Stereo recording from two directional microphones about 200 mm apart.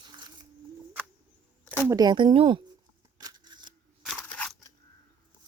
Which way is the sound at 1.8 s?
20° right (ahead or behind).